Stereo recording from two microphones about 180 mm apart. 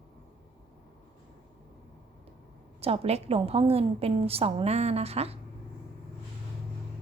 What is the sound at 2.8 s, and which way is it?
A woman's voice, 35° right (ahead or behind).